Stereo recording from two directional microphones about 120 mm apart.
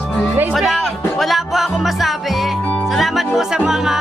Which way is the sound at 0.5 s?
Centre (ahead or behind).